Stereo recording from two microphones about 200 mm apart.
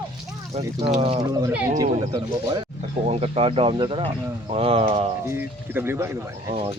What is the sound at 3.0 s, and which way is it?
Speech, 30° right (ahead or behind).